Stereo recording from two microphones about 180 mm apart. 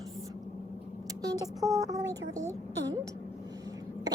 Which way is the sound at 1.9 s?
20° right (ahead or behind).